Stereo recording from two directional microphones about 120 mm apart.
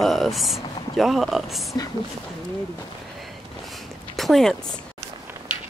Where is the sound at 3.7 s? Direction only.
Centre (ahead or behind).